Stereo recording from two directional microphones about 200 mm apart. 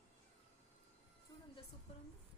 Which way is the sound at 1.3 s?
20° left (ahead or behind).